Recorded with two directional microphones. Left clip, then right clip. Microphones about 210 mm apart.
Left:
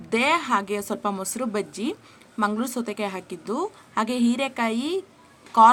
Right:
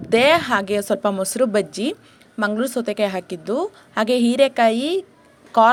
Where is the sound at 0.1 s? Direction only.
20° right (ahead or behind).